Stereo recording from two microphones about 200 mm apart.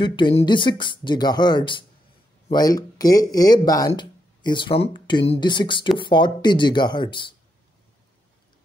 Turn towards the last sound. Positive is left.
turn(degrees=25)  # may be behind; listen again after turning